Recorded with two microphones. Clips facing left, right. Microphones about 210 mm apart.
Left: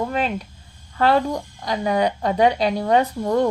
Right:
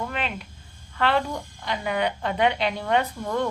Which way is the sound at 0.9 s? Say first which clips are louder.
Left 5 dB; 40° left (ahead or behind).